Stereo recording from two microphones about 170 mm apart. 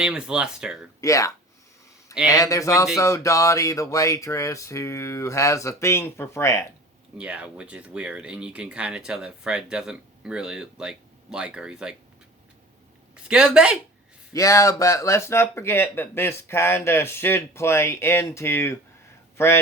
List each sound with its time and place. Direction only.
0.0 s speech: 5° right (ahead or behind)
1.0 s speech: 20° left (ahead or behind)
7.2 s speech: 5° right (ahead or behind)
13.2 s speech: 5° right (ahead or behind)
14.3 s speech: 20° left (ahead or behind)